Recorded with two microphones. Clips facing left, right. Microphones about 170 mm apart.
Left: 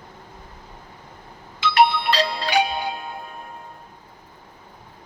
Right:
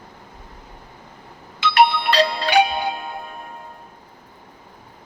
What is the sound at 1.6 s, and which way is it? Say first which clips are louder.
Music: right 1 dB; 65° right (ahead or behind).